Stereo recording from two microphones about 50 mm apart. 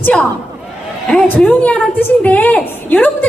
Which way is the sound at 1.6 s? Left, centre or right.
Left.